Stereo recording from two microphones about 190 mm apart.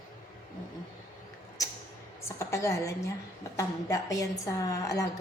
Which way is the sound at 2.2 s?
15° left (ahead or behind).